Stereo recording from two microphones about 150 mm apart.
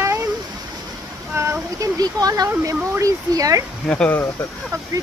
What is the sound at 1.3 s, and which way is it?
Speech, 20° right (ahead or behind).